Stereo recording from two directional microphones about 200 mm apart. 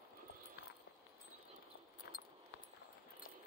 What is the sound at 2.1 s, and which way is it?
Keys jangling, 60° left (ahead or behind).